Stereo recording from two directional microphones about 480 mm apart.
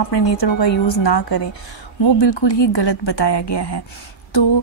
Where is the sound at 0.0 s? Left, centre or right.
Left.